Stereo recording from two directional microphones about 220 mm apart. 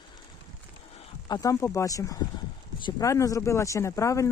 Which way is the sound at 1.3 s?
15° left (ahead or behind).